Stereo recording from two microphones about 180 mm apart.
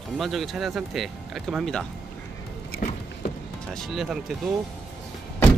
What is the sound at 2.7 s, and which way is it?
Vehicle, 50° left (ahead or behind).